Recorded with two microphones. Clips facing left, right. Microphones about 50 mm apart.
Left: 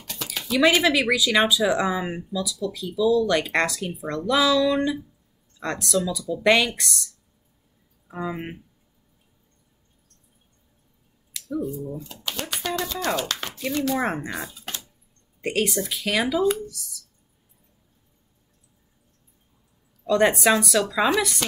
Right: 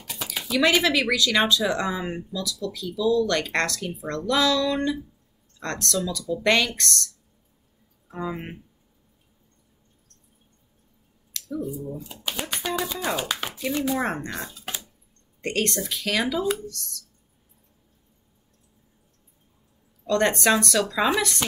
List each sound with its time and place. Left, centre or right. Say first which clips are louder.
0.0 s a sound: even; centre
0.8 s speech: left 2 dB; centre
8.1 s speech: left 1 dB; centre
11.5 s speech: left 2 dB; centre
12.3 s a sound: even; centre
13.7 s speech: left 1 dB; centre
13.9 s speech: left 1 dB; centre
20.1 s speech: left 2 dB; centre